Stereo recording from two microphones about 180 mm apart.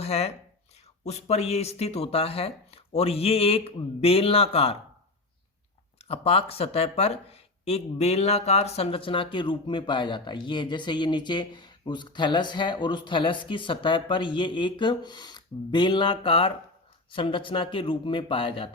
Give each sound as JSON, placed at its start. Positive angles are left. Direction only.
{"t": 0.0, "sound": "speech", "side_deg": 35}
{"t": 6.1, "sound": "speech", "side_deg": 35}